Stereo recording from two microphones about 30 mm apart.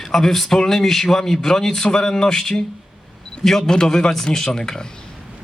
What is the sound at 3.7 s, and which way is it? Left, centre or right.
Speech, left.